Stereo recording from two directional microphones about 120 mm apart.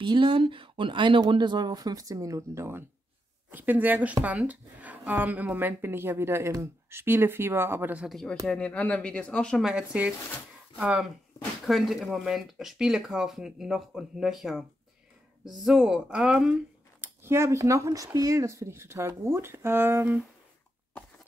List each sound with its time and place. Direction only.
0.0 s speech: 45° right (ahead or behind); by 8.1 s 15° right (ahead or behind)
8.1 s speech: 5° left (ahead or behind)
9.7 s speech: 10° right (ahead or behind)
17.0 s speech: 20° right (ahead or behind)